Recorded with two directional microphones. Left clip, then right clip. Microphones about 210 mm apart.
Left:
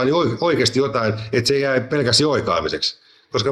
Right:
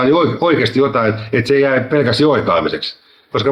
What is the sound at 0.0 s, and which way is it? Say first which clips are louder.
Speech: right 5 dB; 50° left (ahead or behind).